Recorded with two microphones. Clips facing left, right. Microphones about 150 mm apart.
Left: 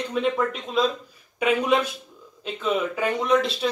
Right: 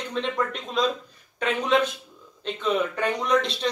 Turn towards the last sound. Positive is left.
turn(degrees=5)  # may be behind; listen again after turning